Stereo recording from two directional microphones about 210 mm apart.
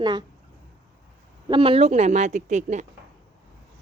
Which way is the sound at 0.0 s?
20° right (ahead or behind).